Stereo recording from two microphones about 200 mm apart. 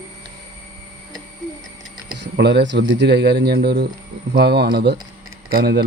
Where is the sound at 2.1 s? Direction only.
55° right (ahead or behind).